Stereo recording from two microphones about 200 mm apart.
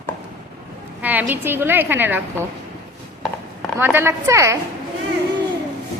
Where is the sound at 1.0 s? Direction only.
10° right (ahead or behind).